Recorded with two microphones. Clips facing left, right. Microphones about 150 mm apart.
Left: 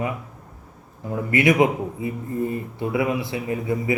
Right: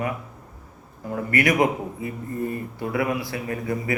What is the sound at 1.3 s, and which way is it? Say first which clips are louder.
A man's voice: left 3 dB; 20° left (ahead or behind).